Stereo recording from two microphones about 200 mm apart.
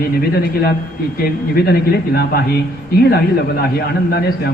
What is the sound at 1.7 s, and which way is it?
Speech, 50° left (ahead or behind).